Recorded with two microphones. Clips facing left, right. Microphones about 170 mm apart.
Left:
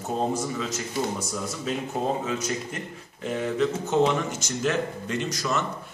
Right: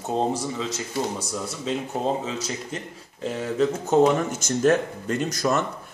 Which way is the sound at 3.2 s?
40° right (ahead or behind).